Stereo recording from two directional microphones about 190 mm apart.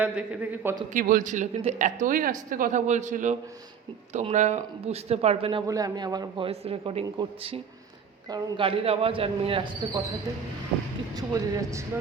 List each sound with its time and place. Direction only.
0.0 s a man's voice: 10° right (ahead or behind)
0.9 s speech: 45° right (ahead or behind); by 5.6 s 30° right (ahead or behind)
5.6 s a man's voice: 20° right (ahead or behind)
11.1 s a man's voice: 20° right (ahead or behind)